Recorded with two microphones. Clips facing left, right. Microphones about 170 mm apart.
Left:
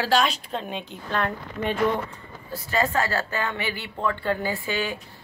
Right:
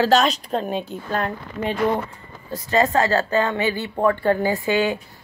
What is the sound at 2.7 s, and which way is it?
Speech, 40° right (ahead or behind).